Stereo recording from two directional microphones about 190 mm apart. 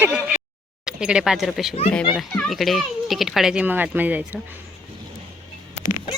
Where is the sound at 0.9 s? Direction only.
5° right (ahead or behind).